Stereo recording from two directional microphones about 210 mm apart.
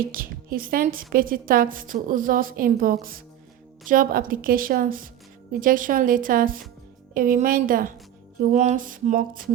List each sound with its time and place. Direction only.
0.0 s a woman's voice: 40° right (ahead or behind)